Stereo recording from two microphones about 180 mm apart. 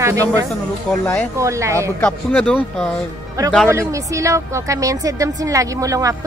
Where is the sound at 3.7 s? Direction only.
15° right (ahead or behind).